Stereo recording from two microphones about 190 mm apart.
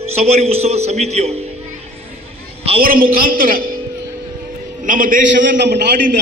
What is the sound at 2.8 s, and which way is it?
A man's voice, 50° right (ahead or behind).